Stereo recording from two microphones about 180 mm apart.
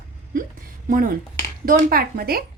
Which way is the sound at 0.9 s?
50° right (ahead or behind).